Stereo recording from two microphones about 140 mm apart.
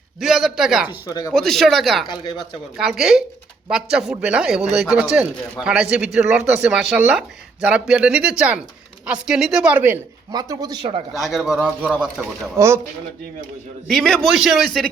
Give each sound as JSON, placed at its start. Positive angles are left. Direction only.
{"t": 0.2, "sound": "a man's voice", "side_deg": 0}
{"t": 1.0, "sound": "speech", "side_deg": 30}
{"t": 1.3, "sound": "a man's voice", "side_deg": 5}
{"t": 10.3, "sound": "speech", "side_deg": -30}
{"t": 11.1, "sound": "a man's voice", "side_deg": 0}
{"t": 12.5, "sound": "speech", "side_deg": -20}
{"t": 13.8, "sound": "a man's voice", "side_deg": 5}